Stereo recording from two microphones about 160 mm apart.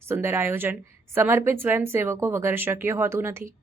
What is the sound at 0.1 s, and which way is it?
Speech, 15° right (ahead or behind).